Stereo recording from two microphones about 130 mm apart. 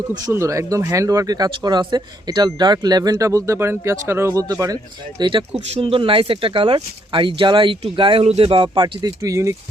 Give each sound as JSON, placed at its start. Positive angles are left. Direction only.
{"t": 0.3, "sound": "speech", "side_deg": -25}